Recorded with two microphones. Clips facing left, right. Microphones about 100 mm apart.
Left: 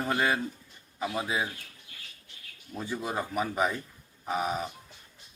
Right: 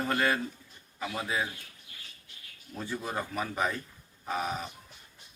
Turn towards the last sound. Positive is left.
turn(degrees=15)  # may be behind; listen again after turning